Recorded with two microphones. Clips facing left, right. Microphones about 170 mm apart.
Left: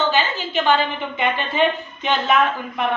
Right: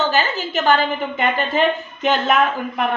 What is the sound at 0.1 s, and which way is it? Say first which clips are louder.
A woman's voice: right 1 dB; 40° right (ahead or behind).